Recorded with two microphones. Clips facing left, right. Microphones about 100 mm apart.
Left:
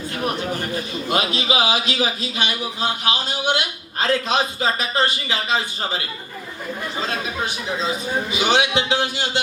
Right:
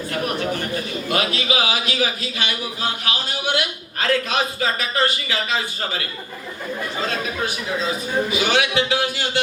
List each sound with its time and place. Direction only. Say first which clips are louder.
0.1 s speech: right 1 dB; 20° left (ahead or behind)
7.1 s speech: right 1 dB; 20° left (ahead or behind)